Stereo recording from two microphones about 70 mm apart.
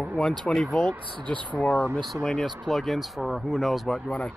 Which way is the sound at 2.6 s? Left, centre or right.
Centre.